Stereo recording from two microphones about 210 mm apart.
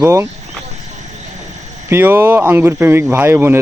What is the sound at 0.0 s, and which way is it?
Speech, 15° right (ahead or behind).